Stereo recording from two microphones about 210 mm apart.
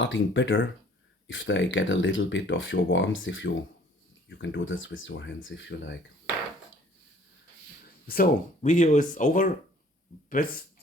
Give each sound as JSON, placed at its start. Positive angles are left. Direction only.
{"t": 0.0, "sound": "speech", "side_deg": 60}
{"t": 8.0, "sound": "speech", "side_deg": 45}